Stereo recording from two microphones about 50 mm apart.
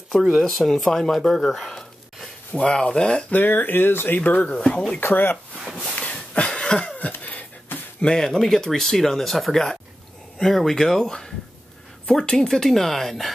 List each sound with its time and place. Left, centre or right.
0.4 s speech: centre
2.5 s speech: left
3.3 s speech: left
4.2 s speech: left
5.0 s speech: left
5.9 s a sound: left
6.3 s cough: centre
7.0 s a sound: left
8.0 s speech: centre